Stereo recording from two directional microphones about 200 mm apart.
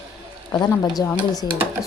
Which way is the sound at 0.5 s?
20° left (ahead or behind).